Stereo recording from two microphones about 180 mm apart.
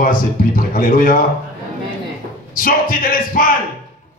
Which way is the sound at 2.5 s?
50° left (ahead or behind).